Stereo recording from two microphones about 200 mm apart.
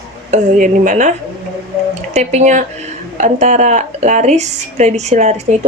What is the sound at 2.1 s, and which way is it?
A woman's voice, 35° right (ahead or behind).